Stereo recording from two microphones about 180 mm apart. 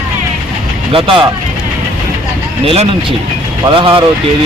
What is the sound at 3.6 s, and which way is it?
Speech, 30° right (ahead or behind).